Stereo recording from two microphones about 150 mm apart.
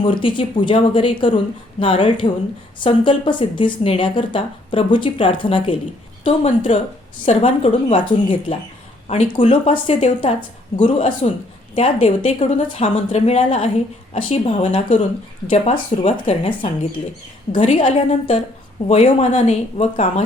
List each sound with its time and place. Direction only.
0.0 s a woman's voice: 35° left (ahead or behind)